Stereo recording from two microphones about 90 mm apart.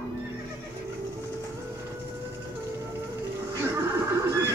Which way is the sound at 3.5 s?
35° right (ahead or behind).